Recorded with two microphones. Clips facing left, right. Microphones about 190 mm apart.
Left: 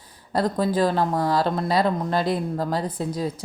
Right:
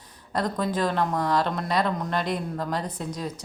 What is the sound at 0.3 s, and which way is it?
Speech, 30° left (ahead or behind).